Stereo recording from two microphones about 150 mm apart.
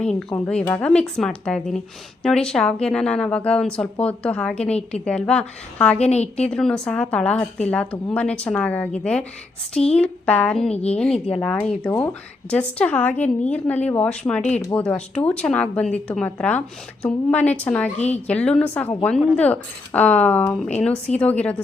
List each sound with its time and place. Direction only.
0.0 s a woman's voice: 5° left (ahead or behind)
6.0 s a woman's voice: 45° left (ahead or behind)
6.5 s a woman's voice: 5° left (ahead or behind)